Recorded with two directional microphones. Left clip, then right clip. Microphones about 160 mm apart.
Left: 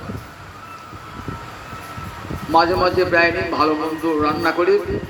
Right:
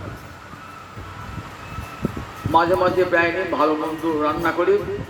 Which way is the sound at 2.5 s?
40° left (ahead or behind).